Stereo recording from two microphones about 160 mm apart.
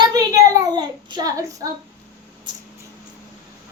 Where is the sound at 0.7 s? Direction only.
25° right (ahead or behind).